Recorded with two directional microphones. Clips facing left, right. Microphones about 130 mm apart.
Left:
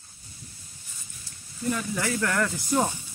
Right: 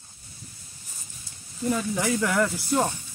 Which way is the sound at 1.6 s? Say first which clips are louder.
Right 3 dB; 20° right (ahead or behind).